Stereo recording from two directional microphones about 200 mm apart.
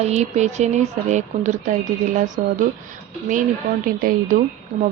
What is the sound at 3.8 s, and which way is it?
Speech, 45° right (ahead or behind).